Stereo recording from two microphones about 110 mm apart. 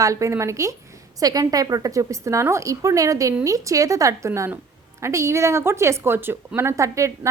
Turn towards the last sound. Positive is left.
turn(degrees=-30)  # may be behind; listen again after turning